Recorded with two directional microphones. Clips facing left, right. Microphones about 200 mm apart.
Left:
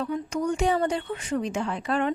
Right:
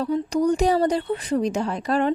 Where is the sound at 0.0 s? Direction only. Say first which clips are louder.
Right 6 dB; 35° right (ahead or behind).